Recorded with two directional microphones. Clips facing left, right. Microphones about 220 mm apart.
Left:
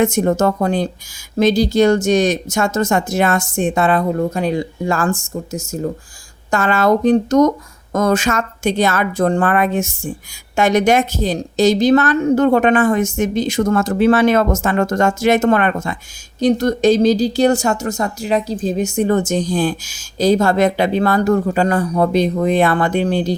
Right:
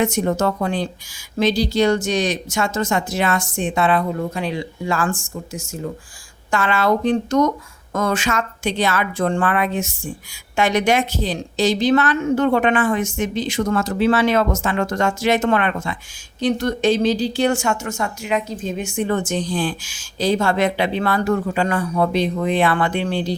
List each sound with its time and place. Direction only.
0.0 s a woman's voice: 45° left (ahead or behind)